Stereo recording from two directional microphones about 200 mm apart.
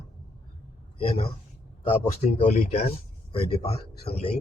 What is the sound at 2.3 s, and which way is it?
Speech, 35° left (ahead or behind).